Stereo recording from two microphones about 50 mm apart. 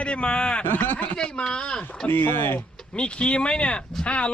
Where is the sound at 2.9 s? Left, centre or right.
Left.